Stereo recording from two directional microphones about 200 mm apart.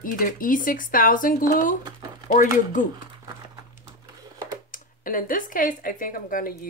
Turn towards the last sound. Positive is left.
turn(degrees=45)  # may be behind; listen again after turning